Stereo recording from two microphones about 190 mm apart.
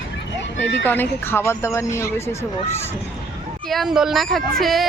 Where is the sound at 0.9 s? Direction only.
10° left (ahead or behind).